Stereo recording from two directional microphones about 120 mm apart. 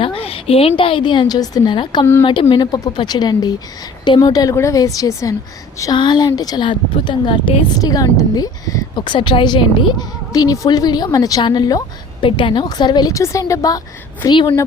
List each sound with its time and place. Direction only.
0.0 s a woman's voice: 50° left (ahead or behind)
7.8 s a woman's voice: 30° left (ahead or behind)
14.3 s a woman's voice: 40° left (ahead or behind)